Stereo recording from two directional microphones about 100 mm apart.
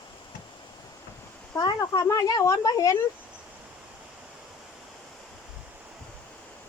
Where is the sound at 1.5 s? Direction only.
35° left (ahead or behind).